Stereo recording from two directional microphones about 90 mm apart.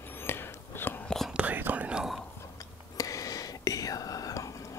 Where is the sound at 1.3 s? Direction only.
15° right (ahead or behind).